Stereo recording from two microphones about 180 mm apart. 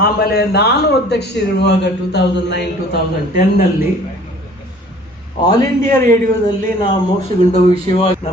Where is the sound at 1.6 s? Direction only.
70° left (ahead or behind).